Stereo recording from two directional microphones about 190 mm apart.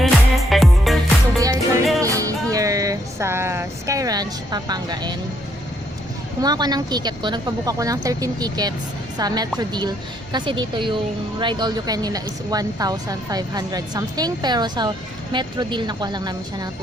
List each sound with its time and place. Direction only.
0.0 s music: centre (ahead or behind)
1.4 s music: 15° right (ahead or behind)
6.4 s a woman's voice: 20° right (ahead or behind)